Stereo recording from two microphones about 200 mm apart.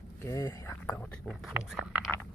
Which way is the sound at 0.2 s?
15° left (ahead or behind).